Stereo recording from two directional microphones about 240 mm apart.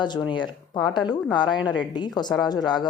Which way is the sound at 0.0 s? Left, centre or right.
Centre.